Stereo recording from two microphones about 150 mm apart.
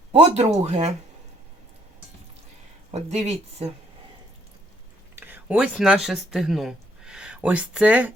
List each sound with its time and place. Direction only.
0.1 s speech: 45° right (ahead or behind)
2.9 s speech: 45° right (ahead or behind)
5.1 s speech: 15° right (ahead or behind)